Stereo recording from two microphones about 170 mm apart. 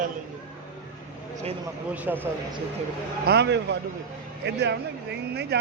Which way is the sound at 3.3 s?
85° right.